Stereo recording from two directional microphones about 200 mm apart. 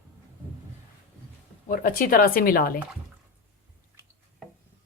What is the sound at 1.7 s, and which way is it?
Speech, 45° left (ahead or behind).